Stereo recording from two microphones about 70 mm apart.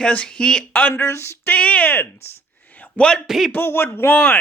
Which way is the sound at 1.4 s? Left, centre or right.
Left.